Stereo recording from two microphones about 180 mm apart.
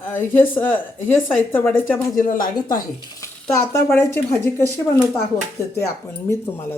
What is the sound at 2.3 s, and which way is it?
A woman's voice, 20° left (ahead or behind).